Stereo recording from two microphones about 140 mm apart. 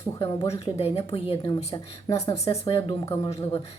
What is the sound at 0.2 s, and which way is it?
A woman's voice, 45° left (ahead or behind).